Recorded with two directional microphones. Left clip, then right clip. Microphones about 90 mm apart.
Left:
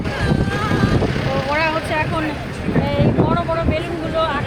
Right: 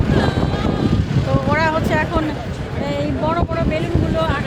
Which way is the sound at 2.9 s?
70° right (ahead or behind).